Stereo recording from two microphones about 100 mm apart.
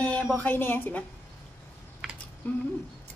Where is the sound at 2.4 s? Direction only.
20° left (ahead or behind).